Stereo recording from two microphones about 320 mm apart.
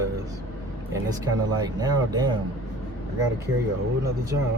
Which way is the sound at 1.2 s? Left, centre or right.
Centre.